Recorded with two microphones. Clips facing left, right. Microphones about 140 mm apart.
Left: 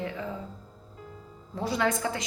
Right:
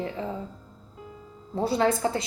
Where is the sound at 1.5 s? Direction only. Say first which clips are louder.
Right 4 dB; 30° right (ahead or behind).